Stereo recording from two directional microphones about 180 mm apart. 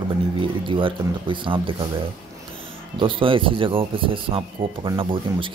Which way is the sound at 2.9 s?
30° right (ahead or behind).